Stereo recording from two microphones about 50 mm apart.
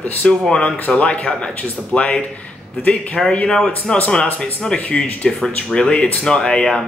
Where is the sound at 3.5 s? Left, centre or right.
Centre.